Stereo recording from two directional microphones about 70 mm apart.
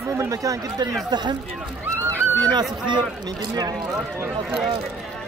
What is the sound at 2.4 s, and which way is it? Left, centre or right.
Speech, right.